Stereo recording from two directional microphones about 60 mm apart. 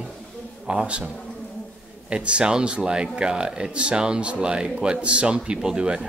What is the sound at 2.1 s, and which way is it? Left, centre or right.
Speech, centre.